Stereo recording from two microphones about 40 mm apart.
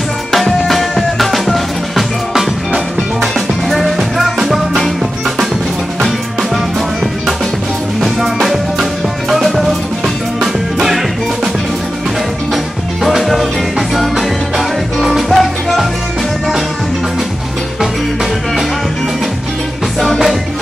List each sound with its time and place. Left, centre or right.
0.3 s music: centre
8.0 s music: centre
10.4 s music: centre
13.2 s music: centre